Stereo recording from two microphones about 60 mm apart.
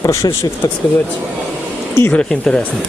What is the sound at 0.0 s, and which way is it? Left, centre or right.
Speech, left.